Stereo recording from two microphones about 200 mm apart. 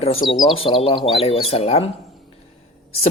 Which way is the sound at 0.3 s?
25° left (ahead or behind).